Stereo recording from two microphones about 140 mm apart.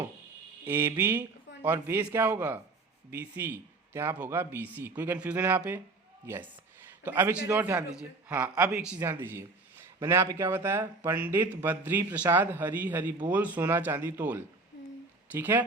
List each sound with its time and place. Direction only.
0.6 s a man's voice: 15° right (ahead or behind)